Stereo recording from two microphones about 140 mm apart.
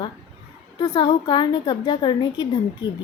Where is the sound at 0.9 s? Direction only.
35° left (ahead or behind).